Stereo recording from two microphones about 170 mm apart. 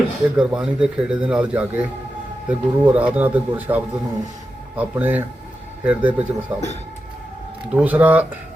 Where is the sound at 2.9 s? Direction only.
10° right (ahead or behind).